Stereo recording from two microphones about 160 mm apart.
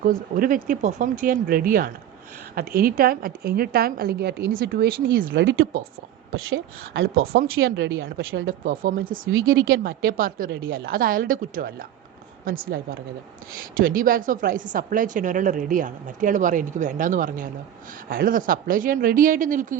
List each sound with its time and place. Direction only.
0.0 s a woman's voice: 60° right (ahead or behind); by 4.5 s 90° right
4.6 s speech: 70° right (ahead or behind)
6.9 s a woman's voice: 75° right (ahead or behind); by 19.7 s 55° right (ahead or behind)